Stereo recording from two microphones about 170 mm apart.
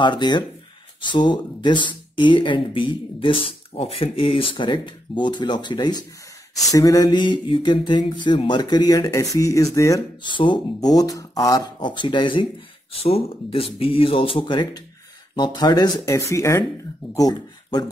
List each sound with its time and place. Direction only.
0.0 s speech: 25° left (ahead or behind)